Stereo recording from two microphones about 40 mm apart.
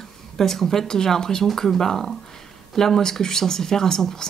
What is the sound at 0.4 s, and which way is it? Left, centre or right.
Speech, centre.